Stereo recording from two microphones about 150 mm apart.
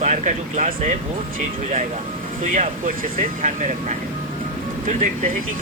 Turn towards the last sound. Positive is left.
turn(degrees=-60)  # may be behind; listen again after turning